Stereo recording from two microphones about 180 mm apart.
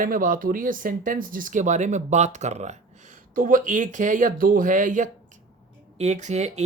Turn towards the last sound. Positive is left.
turn(degrees=-40)  # may be behind; listen again after turning